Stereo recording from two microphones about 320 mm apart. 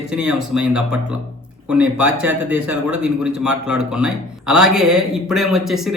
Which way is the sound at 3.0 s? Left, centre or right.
Centre.